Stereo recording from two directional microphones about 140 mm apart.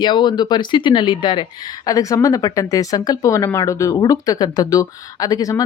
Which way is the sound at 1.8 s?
25° left (ahead or behind).